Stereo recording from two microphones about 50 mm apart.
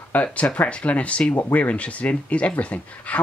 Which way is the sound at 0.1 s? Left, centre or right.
Left.